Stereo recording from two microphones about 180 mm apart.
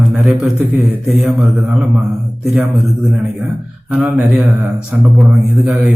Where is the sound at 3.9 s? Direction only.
5° right (ahead or behind).